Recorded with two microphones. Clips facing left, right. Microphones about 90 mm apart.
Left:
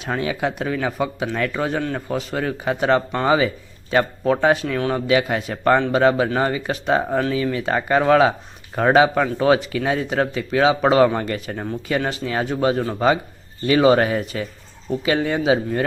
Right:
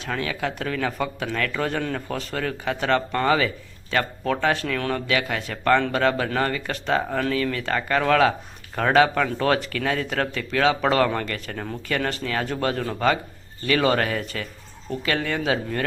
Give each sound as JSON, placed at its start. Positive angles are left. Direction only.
{"t": 0.0, "sound": "a man's voice", "side_deg": 20}